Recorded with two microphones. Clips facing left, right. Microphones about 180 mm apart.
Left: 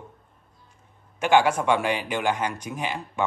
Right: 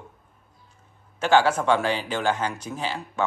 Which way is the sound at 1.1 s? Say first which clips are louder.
Even; 15° left (ahead or behind).